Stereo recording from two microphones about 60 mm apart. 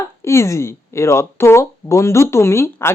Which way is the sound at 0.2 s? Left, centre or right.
Left.